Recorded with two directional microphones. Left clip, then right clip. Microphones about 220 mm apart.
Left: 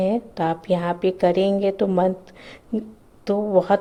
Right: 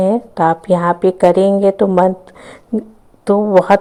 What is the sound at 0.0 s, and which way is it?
A woman's voice, 20° right (ahead or behind).